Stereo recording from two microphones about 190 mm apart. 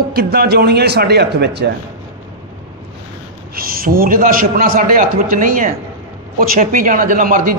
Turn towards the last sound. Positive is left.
turn(degrees=-45)  # may be behind; listen again after turning